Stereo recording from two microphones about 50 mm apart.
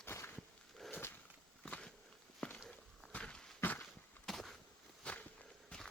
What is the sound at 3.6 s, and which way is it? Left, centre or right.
Horse, left.